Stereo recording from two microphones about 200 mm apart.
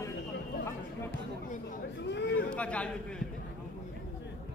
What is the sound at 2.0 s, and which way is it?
Speech, 60° left (ahead or behind).